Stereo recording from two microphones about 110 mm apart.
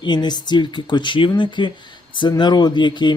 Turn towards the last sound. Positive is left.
turn(degrees=45)  # may be behind; listen again after turning